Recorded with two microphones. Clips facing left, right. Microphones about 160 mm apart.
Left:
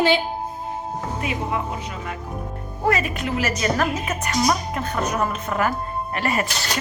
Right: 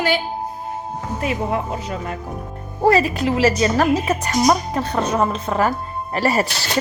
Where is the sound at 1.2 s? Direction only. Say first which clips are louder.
Right 5 dB; 35° right (ahead or behind).